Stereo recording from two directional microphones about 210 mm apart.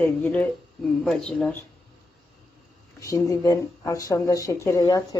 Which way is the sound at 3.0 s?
15° left (ahead or behind).